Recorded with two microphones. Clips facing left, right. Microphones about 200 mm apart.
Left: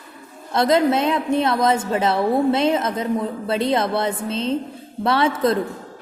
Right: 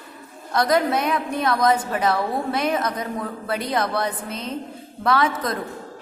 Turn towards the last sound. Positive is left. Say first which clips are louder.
# left 3 dB
turn(degrees=30)  # may be behind; listen again after turning